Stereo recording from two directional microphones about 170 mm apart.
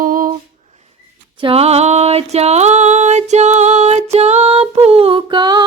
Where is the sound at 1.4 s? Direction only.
35° right (ahead or behind).